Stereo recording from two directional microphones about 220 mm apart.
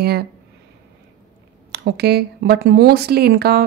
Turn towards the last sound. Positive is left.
turn(degrees=-45)  # may be behind; listen again after turning